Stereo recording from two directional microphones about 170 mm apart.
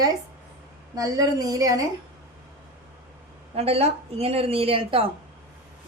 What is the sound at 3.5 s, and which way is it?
A woman's voice, 35° right (ahead or behind).